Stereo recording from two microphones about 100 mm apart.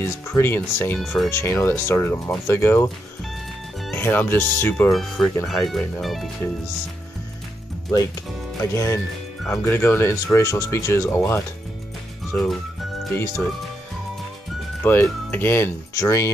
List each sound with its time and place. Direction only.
0.0 s speech: 25° left (ahead or behind)
1.0 s speech: centre (ahead or behind)
1.3 s speech: 25° left (ahead or behind)
3.9 s speech: 20° left (ahead or behind)
4.9 s speech: centre (ahead or behind)
8.7 s speech: 30° left (ahead or behind)
14.8 s speech: 20° left (ahead or behind)